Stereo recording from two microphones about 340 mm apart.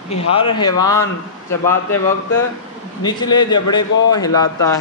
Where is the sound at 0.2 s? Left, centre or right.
Centre.